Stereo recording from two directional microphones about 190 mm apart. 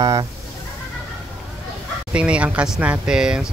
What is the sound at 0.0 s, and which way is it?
Speech, 20° right (ahead or behind).